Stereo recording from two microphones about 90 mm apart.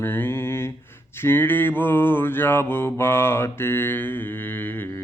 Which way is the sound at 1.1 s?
25° left (ahead or behind).